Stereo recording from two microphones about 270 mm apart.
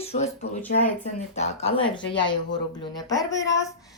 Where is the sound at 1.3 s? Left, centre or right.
Left.